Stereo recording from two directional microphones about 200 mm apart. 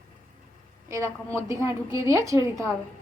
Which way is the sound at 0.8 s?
15° right (ahead or behind).